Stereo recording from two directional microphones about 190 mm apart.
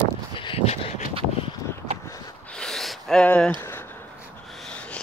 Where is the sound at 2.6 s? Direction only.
Centre (ahead or behind).